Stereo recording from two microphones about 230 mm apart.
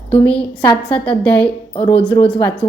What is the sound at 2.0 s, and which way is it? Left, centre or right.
Speech, left.